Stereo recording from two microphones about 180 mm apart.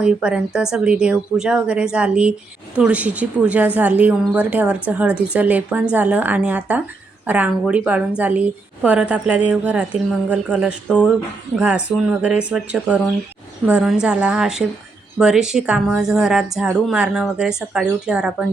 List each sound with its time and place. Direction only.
0.0 s a woman's voice: 5° right (ahead or behind)